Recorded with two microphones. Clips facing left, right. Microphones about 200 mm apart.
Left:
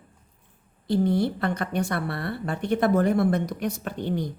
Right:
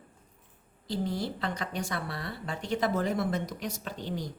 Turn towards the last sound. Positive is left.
turn(degrees=60)  # may be behind; listen again after turning